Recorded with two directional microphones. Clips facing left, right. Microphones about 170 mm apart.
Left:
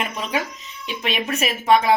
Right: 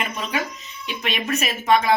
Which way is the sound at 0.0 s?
25° left (ahead or behind).